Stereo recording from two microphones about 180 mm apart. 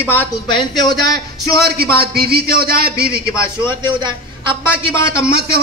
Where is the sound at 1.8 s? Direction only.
60° right (ahead or behind).